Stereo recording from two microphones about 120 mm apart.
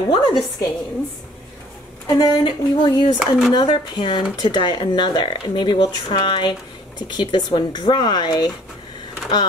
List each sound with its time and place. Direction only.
0.1 s speech: 35° left (ahead or behind)
2.0 s speech: 40° left (ahead or behind)
3.2 s speech: centre (ahead or behind)
3.5 s speech: 40° left (ahead or behind)